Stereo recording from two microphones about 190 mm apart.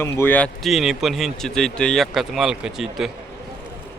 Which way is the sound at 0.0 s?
10° left (ahead or behind).